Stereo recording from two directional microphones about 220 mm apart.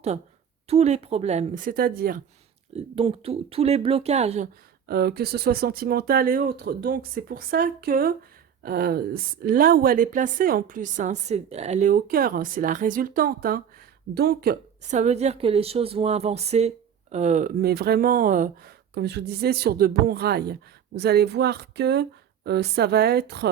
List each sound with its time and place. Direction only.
0.7 s speech: 30° right (ahead or behind)
2.7 s speech: 25° right (ahead or behind)
4.9 s speech: 45° right (ahead or behind)
14.8 s speech: 30° right (ahead or behind); by 23.5 s 50° right (ahead or behind)